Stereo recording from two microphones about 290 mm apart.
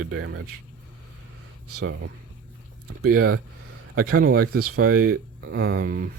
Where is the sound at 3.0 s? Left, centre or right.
Right.